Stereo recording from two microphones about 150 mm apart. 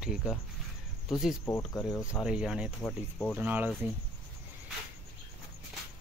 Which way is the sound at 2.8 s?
10° left (ahead or behind).